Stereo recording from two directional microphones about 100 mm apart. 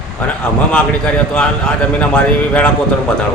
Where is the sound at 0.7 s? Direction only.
10° left (ahead or behind).